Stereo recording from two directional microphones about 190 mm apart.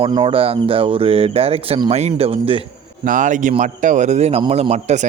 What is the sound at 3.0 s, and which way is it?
A man's voice, 45° right (ahead or behind).